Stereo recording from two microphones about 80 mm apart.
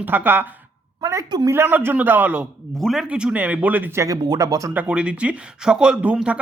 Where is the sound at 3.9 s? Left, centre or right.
Right.